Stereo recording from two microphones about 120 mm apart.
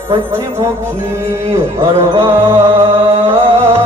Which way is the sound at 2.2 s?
20° right (ahead or behind).